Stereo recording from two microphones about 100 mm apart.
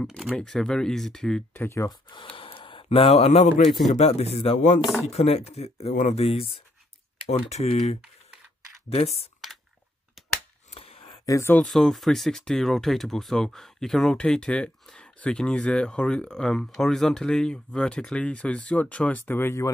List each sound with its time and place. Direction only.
0.4 s speech: 5° left (ahead or behind)
1.5 s speech: 25° left (ahead or behind)
2.0 s speech: 60° left (ahead or behind); by 6.6 s 75° left (ahead or behind)
7.2 s speech: 90° left
10.7 s a sound: 75° left (ahead or behind)
11.2 s speech: 30° left (ahead or behind)
11.6 s speech: 5° left (ahead or behind); by 19.7 s 25° left (ahead or behind)